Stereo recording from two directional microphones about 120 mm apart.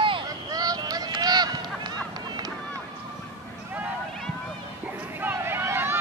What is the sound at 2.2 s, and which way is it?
Boat, 35° right (ahead or behind).